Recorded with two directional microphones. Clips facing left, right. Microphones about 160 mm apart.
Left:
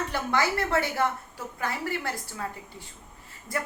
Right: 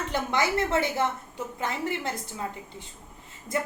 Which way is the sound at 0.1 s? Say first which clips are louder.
Right 3 dB; 20° right (ahead or behind).